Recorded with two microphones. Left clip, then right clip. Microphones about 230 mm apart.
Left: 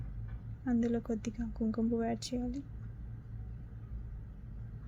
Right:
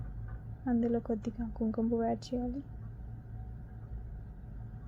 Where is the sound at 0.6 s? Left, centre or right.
Centre.